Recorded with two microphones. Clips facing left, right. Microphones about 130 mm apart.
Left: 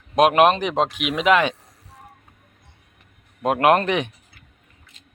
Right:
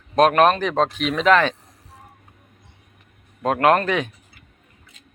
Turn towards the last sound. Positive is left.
turn(degrees=20)  # may be behind; listen again after turning